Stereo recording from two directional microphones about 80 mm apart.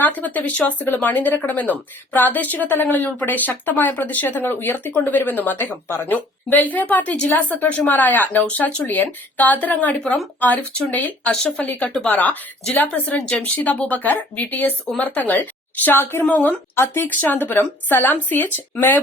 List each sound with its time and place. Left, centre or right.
0.0 s a woman's voice: centre